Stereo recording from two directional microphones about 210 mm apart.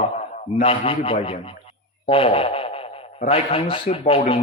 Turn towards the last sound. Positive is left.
turn(degrees=25)  # may be behind; listen again after turning